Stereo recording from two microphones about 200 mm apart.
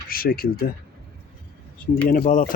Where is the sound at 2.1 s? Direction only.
45° left (ahead or behind).